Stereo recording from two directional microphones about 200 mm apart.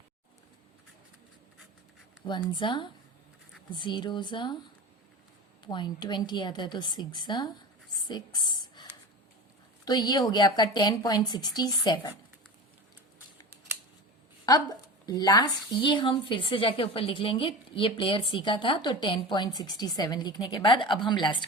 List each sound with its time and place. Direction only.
2.2 s a woman's voice: 25° left (ahead or behind)
5.6 s a woman's voice: 20° left (ahead or behind)
8.0 s a sound: 20° left (ahead or behind)
9.8 s a woman's voice: 20° left (ahead or behind)
14.4 s a woman's voice: 20° left (ahead or behind)